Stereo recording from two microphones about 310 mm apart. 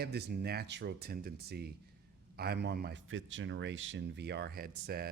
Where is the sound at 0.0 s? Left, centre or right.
Right.